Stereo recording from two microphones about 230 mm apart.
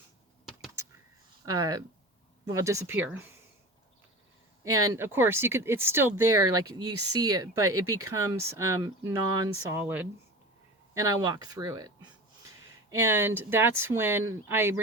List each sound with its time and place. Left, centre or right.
1.5 s speech: centre
4.6 s speech: centre
13.1 s speech: centre